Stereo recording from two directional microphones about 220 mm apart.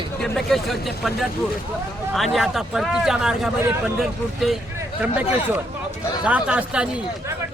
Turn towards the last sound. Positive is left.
turn(degrees=-5)  # may be behind; listen again after turning